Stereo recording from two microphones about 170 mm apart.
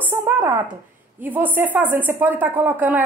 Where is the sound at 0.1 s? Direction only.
15° right (ahead or behind).